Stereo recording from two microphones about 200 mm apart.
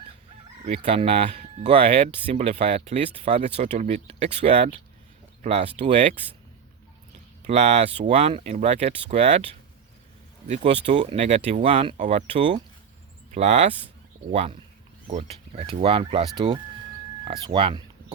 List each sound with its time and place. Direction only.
0.6 s speech: 30° right (ahead or behind)
7.4 s speech: 35° right (ahead or behind)
10.5 s speech: 35° right (ahead or behind)